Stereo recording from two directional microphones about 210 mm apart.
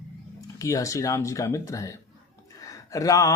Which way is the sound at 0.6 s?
15° left (ahead or behind).